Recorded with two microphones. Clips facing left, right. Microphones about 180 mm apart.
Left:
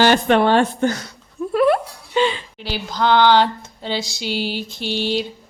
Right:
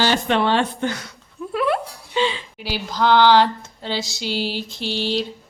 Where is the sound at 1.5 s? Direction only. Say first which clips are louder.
Left 5 dB; 45° left (ahead or behind).